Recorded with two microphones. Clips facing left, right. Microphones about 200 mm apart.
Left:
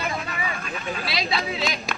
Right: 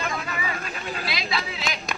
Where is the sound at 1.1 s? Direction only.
25° left (ahead or behind).